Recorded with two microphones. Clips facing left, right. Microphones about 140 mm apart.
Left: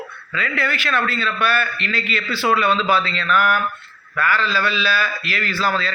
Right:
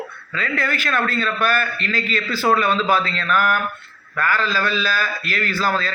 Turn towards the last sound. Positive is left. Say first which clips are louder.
# even
turn(degrees=-45)  # may be behind; listen again after turning